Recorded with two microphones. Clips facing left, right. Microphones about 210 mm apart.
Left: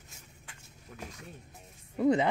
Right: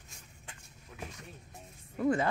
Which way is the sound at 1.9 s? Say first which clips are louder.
Left 4 dB; 20° left (ahead or behind).